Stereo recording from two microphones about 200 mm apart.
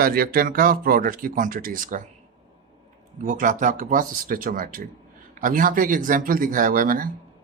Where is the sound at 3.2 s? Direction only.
40° right (ahead or behind).